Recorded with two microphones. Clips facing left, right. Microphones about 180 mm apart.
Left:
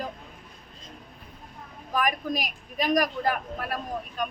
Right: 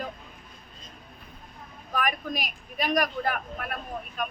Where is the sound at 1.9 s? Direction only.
40° left (ahead or behind).